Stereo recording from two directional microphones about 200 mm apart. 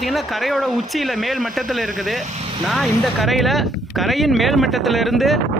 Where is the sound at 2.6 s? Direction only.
Centre (ahead or behind).